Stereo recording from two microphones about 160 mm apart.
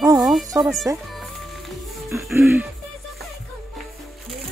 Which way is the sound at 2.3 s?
15° right (ahead or behind).